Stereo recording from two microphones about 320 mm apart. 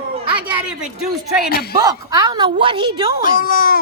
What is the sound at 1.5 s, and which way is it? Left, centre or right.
Speech, left.